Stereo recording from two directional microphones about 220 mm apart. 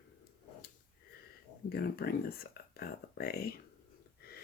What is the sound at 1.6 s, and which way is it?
Speech, 45° left (ahead or behind).